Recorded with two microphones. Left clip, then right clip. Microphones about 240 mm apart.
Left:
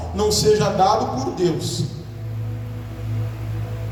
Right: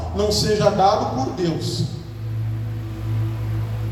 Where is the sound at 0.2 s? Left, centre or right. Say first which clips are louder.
Left 2 dB; left.